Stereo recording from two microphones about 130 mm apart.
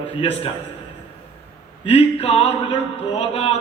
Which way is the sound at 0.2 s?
50° left (ahead or behind).